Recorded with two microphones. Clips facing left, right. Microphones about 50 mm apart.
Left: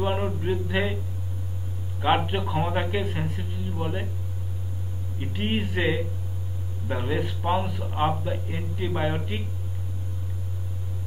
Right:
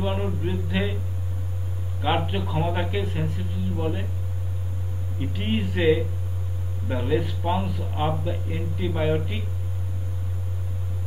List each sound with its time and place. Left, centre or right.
0.0 s speech: left
2.0 s speech: left
3.8 s hum: centre
5.2 s hum: centre
7.7 s speech: left